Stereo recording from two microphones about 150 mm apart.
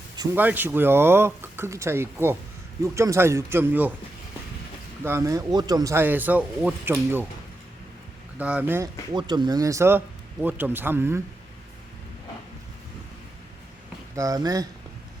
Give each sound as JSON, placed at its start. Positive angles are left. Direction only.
{"t": 0.3, "sound": "speech", "side_deg": -10}
{"t": 5.0, "sound": "speech", "side_deg": -20}
{"t": 8.4, "sound": "speech", "side_deg": -10}
{"t": 9.1, "sound": "speech", "side_deg": -30}
{"t": 14.2, "sound": "speech", "side_deg": -25}